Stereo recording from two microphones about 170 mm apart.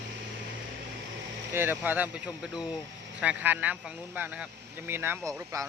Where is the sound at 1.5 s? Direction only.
10° right (ahead or behind).